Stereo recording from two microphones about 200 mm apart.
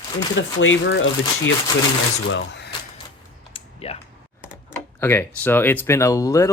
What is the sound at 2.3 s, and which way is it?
Speech, 60° left (ahead or behind).